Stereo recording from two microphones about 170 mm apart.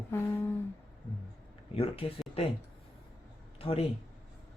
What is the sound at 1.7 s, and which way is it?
Speech, 35° left (ahead or behind).